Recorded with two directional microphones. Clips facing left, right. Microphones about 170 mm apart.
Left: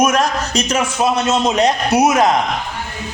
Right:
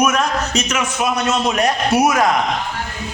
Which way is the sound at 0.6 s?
30° left (ahead or behind).